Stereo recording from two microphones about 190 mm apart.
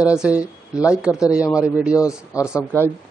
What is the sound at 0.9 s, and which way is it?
Speech, 5° right (ahead or behind).